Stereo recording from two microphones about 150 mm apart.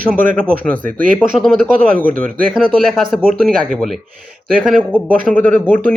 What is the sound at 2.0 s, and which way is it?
Speech, 65° right (ahead or behind).